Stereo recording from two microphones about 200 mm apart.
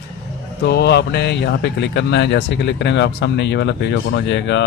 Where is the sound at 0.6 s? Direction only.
55° left (ahead or behind).